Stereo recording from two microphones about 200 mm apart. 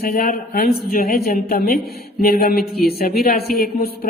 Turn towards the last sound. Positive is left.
turn(degrees=50)  # may be behind; listen again after turning